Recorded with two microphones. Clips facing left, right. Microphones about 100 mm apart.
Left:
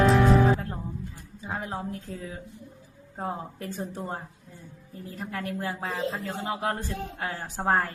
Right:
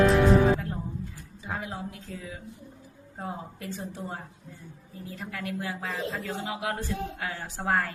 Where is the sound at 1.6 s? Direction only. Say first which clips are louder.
Left 3 dB; 40° left (ahead or behind).